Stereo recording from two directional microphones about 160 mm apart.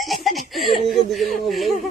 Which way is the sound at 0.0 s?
Centre (ahead or behind).